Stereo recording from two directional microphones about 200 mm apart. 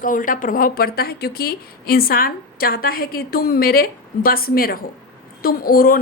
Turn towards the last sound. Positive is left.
turn(degrees=45)  # may be behind; listen again after turning